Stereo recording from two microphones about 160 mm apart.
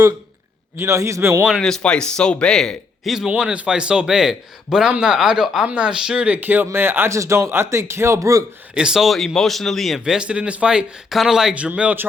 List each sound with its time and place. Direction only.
0.8 s speech: 20° right (ahead or behind)
1.5 s speech: 5° left (ahead or behind); by 8.4 s 20° right (ahead or behind)
8.7 s speech: 5° right (ahead or behind)